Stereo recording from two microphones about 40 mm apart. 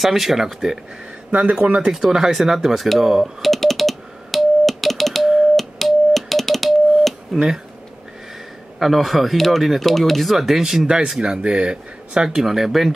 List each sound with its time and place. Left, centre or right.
0.0 s speech: centre
1.3 s speech: right
1.9 s speech: centre
2.9 s computer keyboard: centre
5.6 s music: centre
8.9 s speech: centre; by 12.4 s right
12.4 s speech: centre